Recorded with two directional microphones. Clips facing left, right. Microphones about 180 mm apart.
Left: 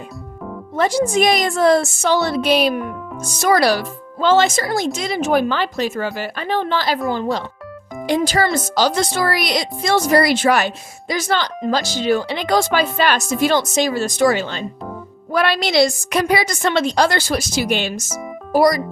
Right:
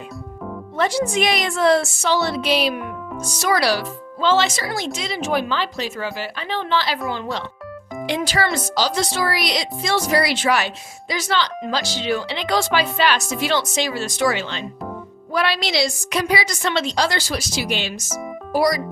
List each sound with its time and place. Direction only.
0.8 s speech: 45° left (ahead or behind)